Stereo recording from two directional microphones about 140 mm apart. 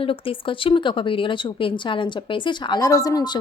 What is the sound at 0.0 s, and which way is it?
A woman's voice, 40° left (ahead or behind).